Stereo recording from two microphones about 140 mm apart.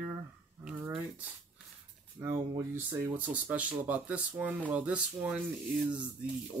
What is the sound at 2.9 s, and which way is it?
Speech, 15° right (ahead or behind).